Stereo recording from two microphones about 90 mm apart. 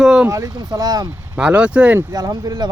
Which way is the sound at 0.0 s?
5° right (ahead or behind).